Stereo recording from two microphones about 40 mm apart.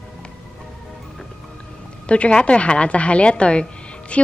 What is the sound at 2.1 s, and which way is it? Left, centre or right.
A woman's voice, left.